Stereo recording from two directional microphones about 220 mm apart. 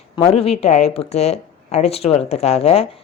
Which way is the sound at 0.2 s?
25° left (ahead or behind).